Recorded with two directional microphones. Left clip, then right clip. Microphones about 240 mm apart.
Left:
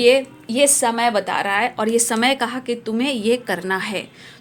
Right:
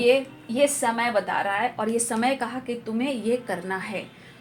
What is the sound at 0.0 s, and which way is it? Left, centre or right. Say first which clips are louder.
Speech: left 6 dB; left.